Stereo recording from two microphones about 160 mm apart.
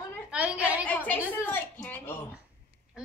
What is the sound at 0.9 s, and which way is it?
A woman's voice, 10° left (ahead or behind).